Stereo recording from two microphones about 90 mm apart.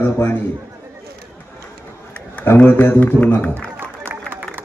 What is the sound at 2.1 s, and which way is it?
A man's voice, 15° left (ahead or behind).